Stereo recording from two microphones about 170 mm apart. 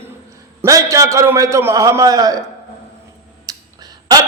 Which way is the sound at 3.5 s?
20° right (ahead or behind).